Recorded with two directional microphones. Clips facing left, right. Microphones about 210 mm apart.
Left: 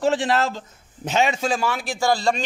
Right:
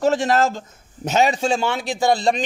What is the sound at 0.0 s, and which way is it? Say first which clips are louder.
A man's voice: right 3 dB; 45° right (ahead or behind).